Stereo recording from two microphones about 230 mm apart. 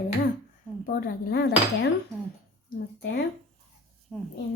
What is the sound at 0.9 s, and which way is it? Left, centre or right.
Speech, left.